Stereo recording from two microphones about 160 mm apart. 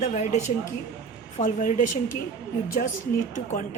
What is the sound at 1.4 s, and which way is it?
Speech, 55° left (ahead or behind).